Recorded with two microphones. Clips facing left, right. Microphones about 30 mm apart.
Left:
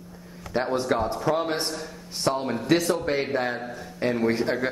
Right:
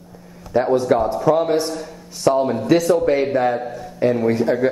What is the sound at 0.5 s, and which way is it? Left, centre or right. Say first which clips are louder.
Speech: right 8 dB; left.